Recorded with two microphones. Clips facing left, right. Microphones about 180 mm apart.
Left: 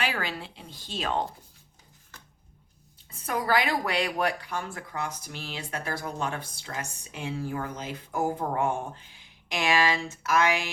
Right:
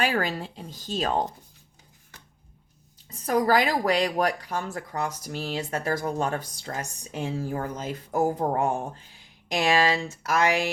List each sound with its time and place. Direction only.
0.0 s speech: 45° right (ahead or behind)
3.1 s speech: 40° right (ahead or behind)